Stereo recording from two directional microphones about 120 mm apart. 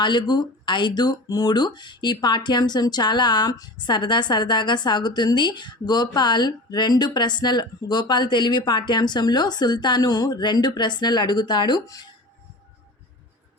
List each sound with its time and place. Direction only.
0.0 s speech: 40° left (ahead or behind)